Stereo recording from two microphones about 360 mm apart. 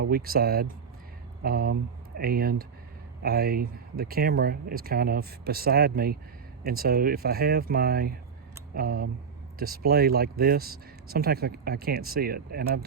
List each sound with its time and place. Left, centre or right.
0.0 s speech: right